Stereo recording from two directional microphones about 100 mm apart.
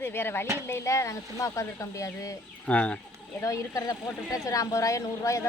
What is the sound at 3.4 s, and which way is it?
A woman's voice, 30° left (ahead or behind).